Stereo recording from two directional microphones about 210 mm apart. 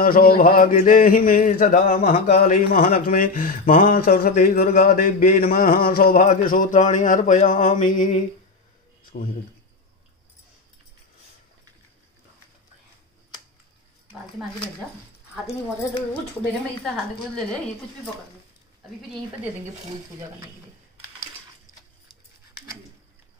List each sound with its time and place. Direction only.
0.0 s mantra: 45° left (ahead or behind)